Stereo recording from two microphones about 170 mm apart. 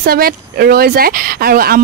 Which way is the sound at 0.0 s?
65° right (ahead or behind).